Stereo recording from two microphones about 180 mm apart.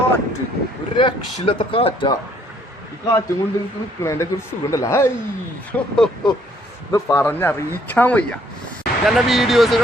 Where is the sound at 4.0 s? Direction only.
15° left (ahead or behind).